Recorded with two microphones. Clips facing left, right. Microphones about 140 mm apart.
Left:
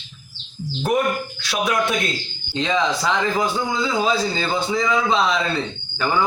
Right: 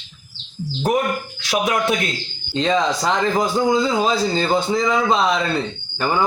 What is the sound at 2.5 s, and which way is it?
Speech, 40° right (ahead or behind).